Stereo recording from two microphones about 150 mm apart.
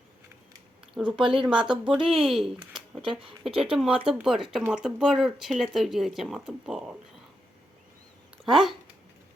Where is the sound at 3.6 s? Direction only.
5° right (ahead or behind).